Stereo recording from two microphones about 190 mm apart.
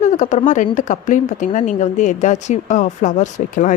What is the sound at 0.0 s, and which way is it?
A woman's voice, 40° left (ahead or behind).